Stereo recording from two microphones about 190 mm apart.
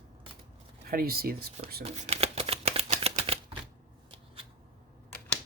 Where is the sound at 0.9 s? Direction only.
50° right (ahead or behind).